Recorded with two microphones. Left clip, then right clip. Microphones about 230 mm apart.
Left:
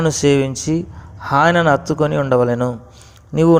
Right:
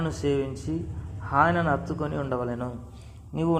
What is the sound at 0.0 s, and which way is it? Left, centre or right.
Speech, left.